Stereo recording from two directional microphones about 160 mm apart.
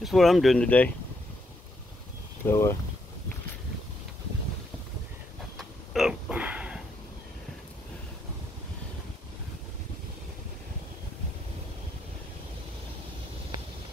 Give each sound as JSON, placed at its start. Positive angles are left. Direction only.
{"t": 0.0, "sound": "speech", "side_deg": 0}
{"t": 2.4, "sound": "speech", "side_deg": 15}
{"t": 5.6, "sound": "a sound", "side_deg": 0}